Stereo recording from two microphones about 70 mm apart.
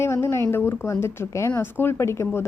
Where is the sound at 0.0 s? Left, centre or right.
Left.